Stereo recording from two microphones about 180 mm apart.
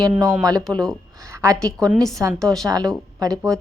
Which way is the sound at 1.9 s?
Centre (ahead or behind).